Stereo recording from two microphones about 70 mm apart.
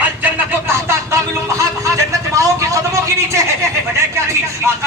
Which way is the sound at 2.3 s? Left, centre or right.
Right.